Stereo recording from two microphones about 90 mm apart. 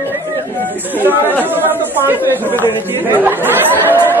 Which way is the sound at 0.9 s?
20° right (ahead or behind).